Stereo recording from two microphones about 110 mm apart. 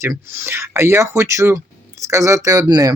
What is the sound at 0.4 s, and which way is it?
Speech, 20° right (ahead or behind).